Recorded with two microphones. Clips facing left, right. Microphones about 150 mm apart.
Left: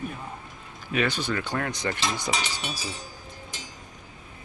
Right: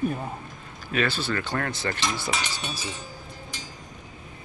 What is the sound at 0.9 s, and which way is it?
Speech, 15° left (ahead or behind).